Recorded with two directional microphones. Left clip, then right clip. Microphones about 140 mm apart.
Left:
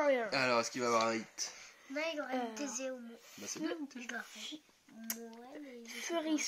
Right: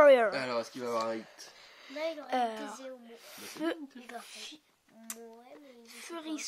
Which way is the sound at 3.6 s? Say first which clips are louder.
Right 6 dB; 70° right (ahead or behind).